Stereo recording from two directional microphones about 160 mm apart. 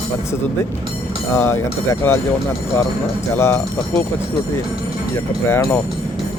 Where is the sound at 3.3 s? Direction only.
15° left (ahead or behind).